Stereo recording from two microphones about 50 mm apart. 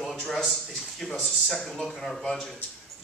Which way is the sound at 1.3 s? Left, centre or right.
Centre.